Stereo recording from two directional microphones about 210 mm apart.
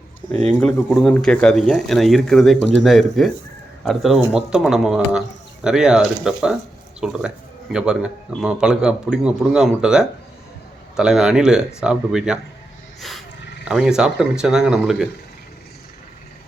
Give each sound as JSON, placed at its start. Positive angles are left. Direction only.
{"t": 0.6, "sound": "speech", "side_deg": 0}
{"t": 13.0, "sound": "wild animals", "side_deg": 0}
{"t": 13.7, "sound": "speech", "side_deg": 0}